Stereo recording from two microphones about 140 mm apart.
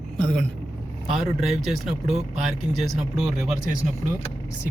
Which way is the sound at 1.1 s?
5° right (ahead or behind).